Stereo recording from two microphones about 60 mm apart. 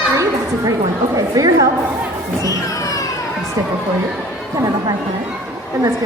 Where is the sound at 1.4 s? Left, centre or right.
Right.